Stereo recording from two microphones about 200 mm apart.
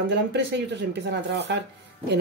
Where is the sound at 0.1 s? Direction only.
60° right (ahead or behind).